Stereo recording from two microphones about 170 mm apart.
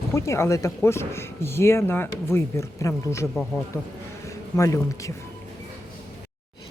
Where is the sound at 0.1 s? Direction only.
15° left (ahead or behind).